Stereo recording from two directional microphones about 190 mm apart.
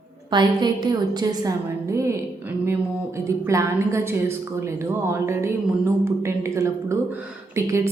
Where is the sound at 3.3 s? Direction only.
15° right (ahead or behind).